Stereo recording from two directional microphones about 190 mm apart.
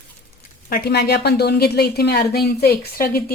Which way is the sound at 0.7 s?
60° left (ahead or behind).